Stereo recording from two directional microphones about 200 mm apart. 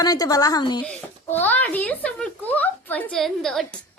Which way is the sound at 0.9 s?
10° left (ahead or behind).